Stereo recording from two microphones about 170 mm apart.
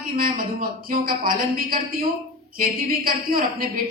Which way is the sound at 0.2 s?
55° right (ahead or behind).